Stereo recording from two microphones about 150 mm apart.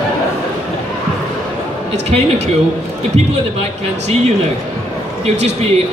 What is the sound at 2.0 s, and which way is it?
Speech, 45° right (ahead or behind).